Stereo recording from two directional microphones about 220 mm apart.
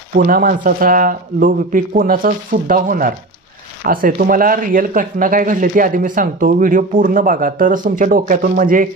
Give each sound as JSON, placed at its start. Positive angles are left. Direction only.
{"t": 0.1, "sound": "speech", "side_deg": -40}